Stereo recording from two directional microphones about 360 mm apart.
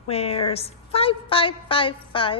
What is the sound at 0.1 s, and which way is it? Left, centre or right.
A woman's voice, centre.